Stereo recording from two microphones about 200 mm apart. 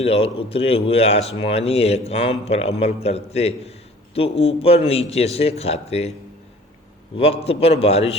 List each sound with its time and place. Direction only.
0.0 s speech: 30° left (ahead or behind)
7.2 s a man's voice: 30° left (ahead or behind)